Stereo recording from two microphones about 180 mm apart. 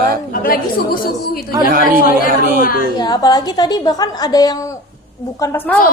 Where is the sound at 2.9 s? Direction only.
20° left (ahead or behind).